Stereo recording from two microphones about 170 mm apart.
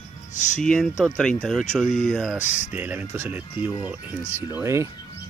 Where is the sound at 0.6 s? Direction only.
5° left (ahead or behind); by 4.9 s 15° right (ahead or behind).